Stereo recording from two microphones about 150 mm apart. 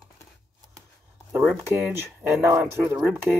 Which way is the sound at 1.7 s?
15° right (ahead or behind).